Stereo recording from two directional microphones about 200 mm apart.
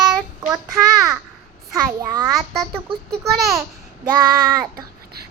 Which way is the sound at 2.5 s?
Centre (ahead or behind).